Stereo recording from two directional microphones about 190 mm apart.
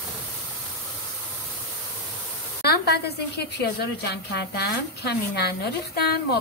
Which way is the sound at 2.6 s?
55° left (ahead or behind).